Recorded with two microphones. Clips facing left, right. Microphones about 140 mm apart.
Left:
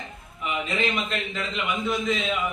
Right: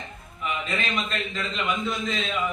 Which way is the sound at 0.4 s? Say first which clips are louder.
Left 2 dB; 20° left (ahead or behind).